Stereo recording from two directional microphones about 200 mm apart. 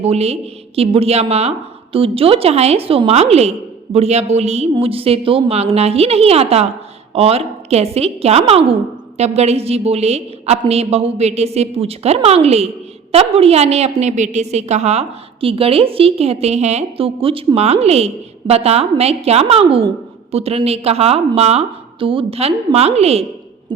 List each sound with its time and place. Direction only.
0.0 s a woman's voice: 30° right (ahead or behind)